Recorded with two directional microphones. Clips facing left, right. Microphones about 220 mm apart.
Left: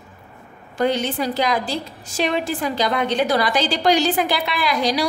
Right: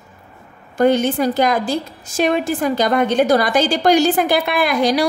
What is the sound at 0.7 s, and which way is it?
A woman's voice, 50° right (ahead or behind).